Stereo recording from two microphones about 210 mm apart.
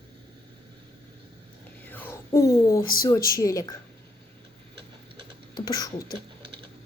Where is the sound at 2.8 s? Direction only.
45° left (ahead or behind).